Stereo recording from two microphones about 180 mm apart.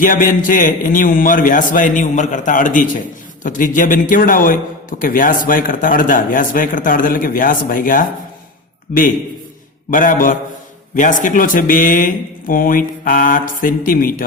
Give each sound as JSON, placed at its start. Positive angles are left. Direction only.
{"t": 0.0, "sound": "a man's voice", "side_deg": 50}